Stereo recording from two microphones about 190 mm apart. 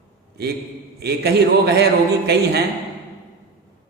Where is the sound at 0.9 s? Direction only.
60° right (ahead or behind).